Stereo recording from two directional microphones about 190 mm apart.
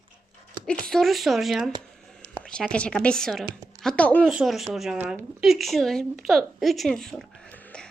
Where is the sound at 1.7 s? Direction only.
20° right (ahead or behind).